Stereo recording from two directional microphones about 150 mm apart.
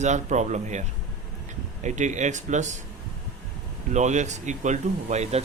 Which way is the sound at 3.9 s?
50° right (ahead or behind).